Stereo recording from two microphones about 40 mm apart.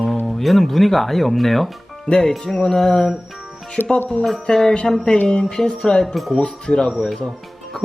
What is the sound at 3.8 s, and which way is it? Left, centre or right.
Speech, left.